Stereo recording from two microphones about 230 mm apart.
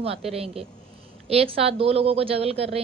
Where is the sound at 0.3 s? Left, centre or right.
Right.